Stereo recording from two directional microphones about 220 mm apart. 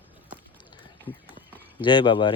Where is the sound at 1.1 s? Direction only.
25° left (ahead or behind).